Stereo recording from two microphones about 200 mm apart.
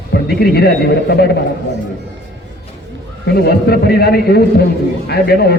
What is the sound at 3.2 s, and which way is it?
A man's voice, 50° left (ahead or behind).